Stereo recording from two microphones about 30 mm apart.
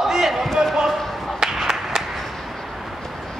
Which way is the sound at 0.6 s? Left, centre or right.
Right.